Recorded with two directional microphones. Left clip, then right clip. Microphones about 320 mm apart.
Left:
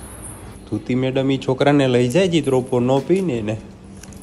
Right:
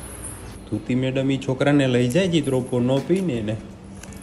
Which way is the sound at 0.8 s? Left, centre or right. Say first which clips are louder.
Left 4 dB; left.